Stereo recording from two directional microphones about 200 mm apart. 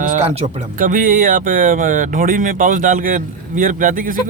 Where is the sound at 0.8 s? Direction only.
45° right (ahead or behind).